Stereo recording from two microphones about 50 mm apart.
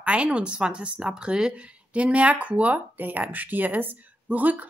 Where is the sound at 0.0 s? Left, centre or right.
Right.